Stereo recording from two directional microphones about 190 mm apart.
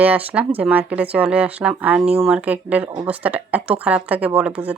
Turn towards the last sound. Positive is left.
turn(degrees=-5)  # may be behind; listen again after turning